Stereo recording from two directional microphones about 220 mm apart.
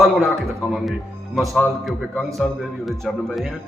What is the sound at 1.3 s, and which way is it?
Speech, centre (ahead or behind).